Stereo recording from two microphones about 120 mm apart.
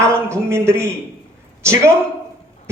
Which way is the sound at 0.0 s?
20° right (ahead or behind).